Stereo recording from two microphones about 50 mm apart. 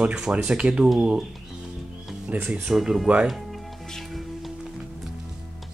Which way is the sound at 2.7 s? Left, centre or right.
Right.